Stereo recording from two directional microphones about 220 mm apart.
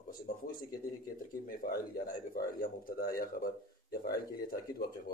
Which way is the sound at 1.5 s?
40° left (ahead or behind).